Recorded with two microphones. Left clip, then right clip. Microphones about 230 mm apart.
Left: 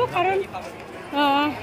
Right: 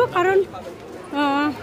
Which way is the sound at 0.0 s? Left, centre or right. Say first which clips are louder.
Right 3 dB; centre.